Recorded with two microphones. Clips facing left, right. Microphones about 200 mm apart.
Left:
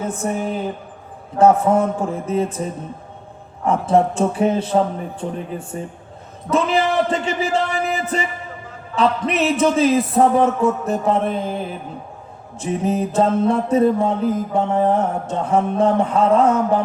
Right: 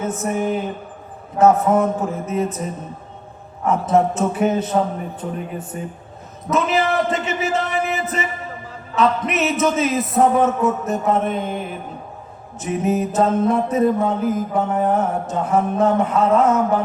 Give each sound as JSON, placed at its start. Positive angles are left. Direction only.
{"t": 0.0, "sound": "speech", "side_deg": 30}
{"t": 1.4, "sound": "mantra", "side_deg": 30}
{"t": 3.7, "sound": "speech", "side_deg": 30}
{"t": 5.2, "sound": "mantra", "side_deg": 30}
{"t": 5.7, "sound": "speech", "side_deg": 30}
{"t": 12.5, "sound": "mantra", "side_deg": 30}